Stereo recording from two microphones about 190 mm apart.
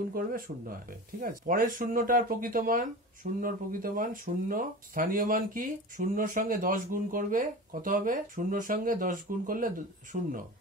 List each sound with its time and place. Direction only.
0.1 s speech: 50° right (ahead or behind)